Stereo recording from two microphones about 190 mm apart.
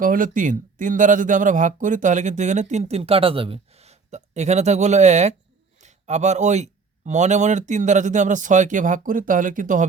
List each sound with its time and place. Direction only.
0.0 s speech: 45° right (ahead or behind)